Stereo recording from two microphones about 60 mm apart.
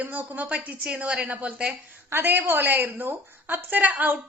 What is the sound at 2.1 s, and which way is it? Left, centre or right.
A woman's voice, right.